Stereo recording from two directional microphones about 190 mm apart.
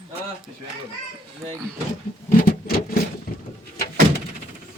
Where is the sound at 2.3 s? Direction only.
50° left (ahead or behind).